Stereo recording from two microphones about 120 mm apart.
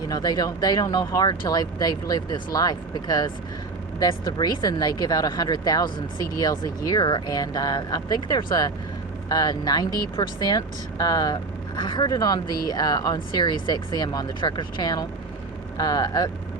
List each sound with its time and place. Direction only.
0.1 s speech: 35° left (ahead or behind)